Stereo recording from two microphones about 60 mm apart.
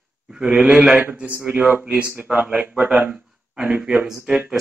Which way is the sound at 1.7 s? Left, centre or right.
Right.